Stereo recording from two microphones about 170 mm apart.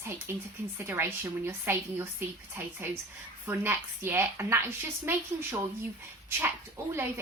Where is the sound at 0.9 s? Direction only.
15° right (ahead or behind).